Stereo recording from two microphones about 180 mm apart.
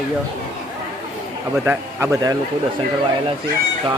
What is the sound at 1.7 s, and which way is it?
Speech, 15° right (ahead or behind).